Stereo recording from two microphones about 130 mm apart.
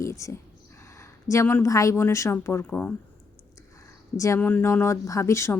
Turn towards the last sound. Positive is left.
turn(degrees=20)  # may be behind; listen again after turning